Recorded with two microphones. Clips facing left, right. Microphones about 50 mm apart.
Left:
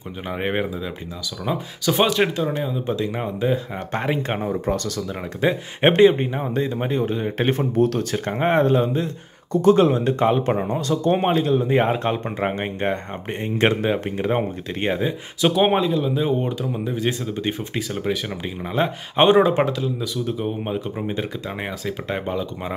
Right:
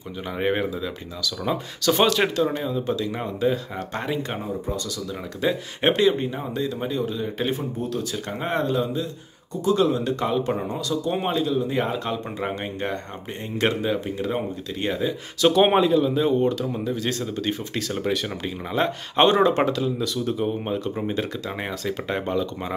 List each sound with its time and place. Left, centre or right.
0.3 s speech: centre
3.9 s speech: left
4.5 s speech: left
5.4 s speech: left
7.7 s speech: left
15.6 s a man's voice: centre
16.0 s speech: centre
17.3 s speech: left
17.7 s speech: centre